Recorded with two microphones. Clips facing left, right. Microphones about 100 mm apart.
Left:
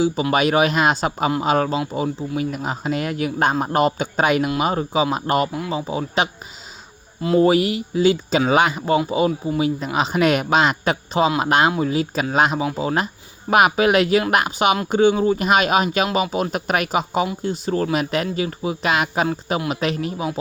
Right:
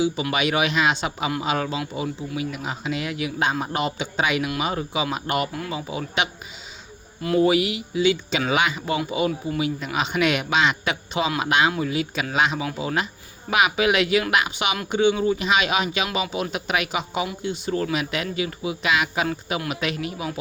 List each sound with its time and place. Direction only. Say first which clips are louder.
0.0 s a man's voice: left 4 dB; 40° left (ahead or behind)
7.4 s a man's voice: left 3 dB; 40° left (ahead or behind)